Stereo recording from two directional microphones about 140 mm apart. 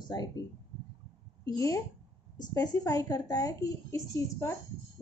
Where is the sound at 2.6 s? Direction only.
25° left (ahead or behind).